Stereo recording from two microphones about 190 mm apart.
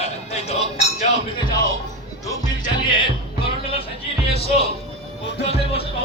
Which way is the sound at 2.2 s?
15° left (ahead or behind).